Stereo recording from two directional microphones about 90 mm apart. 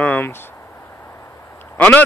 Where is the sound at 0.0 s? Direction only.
20° left (ahead or behind).